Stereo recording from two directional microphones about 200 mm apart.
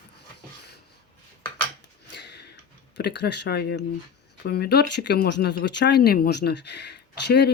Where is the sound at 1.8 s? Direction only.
60° left (ahead or behind).